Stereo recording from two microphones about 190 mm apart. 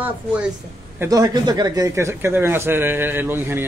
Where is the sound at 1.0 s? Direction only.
20° right (ahead or behind).